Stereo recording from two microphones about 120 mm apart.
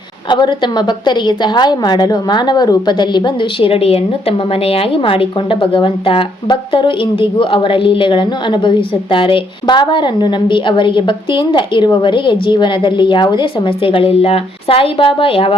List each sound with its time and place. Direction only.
0.3 s a woman's voice: 40° left (ahead or behind)